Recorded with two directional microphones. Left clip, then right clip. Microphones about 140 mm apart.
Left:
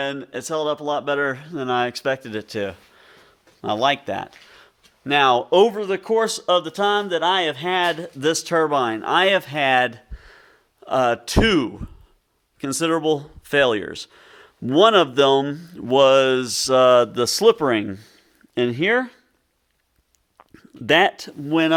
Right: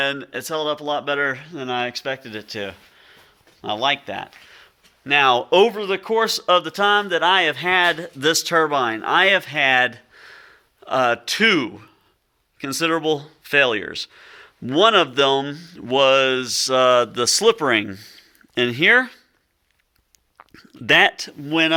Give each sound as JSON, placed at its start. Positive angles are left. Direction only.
{"t": 0.0, "sound": "speech", "side_deg": 15}
{"t": 0.3, "sound": "speech", "side_deg": 35}
{"t": 4.5, "sound": "a sound", "side_deg": 80}
{"t": 5.5, "sound": "speech", "side_deg": 20}
{"t": 5.7, "sound": "speech", "side_deg": 35}
{"t": 6.2, "sound": "speech", "side_deg": 15}
{"t": 20.4, "sound": "a sound", "side_deg": 30}
{"t": 21.2, "sound": "speech", "side_deg": 40}